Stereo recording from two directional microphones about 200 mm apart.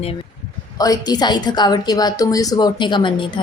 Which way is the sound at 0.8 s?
20° left (ahead or behind).